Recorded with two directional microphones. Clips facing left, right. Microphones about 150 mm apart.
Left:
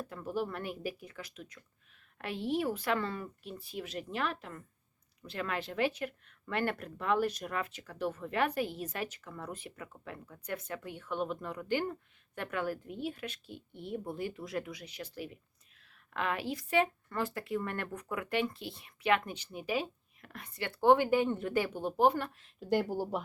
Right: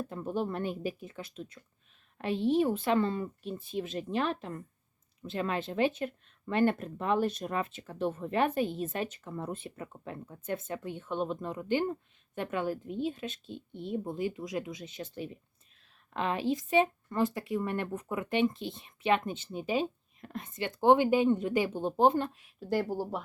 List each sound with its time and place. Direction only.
0.0 s speech: 25° right (ahead or behind)
22.6 s speech: centre (ahead or behind)